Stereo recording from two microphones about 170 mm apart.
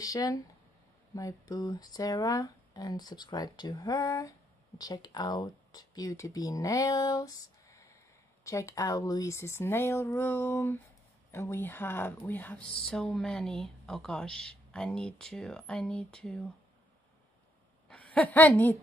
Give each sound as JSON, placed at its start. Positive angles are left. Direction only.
{"t": 0.0, "sound": "speech", "side_deg": 20}
{"t": 17.8, "sound": "a woman's voice", "side_deg": 5}